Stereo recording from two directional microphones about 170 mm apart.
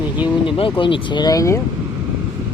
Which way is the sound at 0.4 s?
30° left (ahead or behind).